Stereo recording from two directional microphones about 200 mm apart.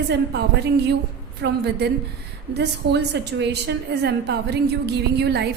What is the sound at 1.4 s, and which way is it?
A woman's voice, 55° right (ahead or behind).